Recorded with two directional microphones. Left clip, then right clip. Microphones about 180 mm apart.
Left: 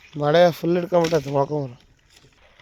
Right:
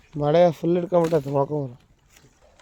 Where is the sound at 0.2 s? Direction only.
5° right (ahead or behind).